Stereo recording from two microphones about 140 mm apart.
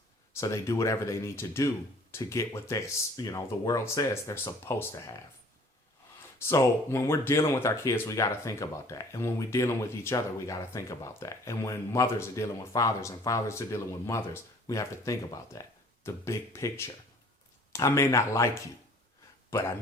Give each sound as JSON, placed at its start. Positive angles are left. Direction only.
{"t": 0.3, "sound": "speech", "side_deg": 20}
{"t": 6.5, "sound": "speech", "side_deg": 20}